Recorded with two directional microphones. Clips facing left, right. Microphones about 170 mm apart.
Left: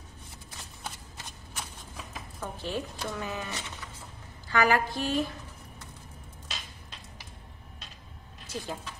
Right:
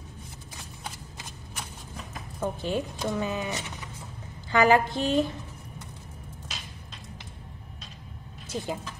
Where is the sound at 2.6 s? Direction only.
20° right (ahead or behind).